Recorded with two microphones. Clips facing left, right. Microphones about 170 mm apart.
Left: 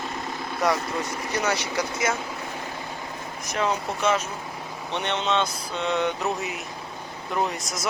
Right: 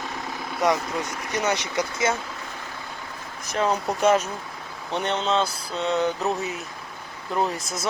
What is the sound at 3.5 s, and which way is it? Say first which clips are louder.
Speech: right 2 dB; 35° right (ahead or behind).